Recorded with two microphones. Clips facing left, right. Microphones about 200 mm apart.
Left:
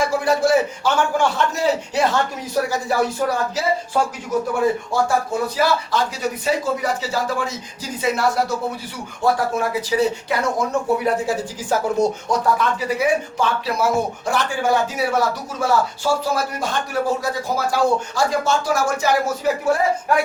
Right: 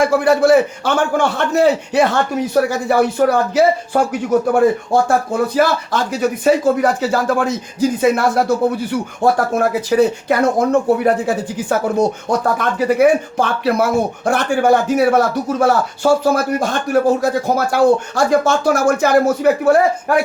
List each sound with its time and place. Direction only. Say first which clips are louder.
0.0 s speech: right 6 dB; 60° right (ahead or behind)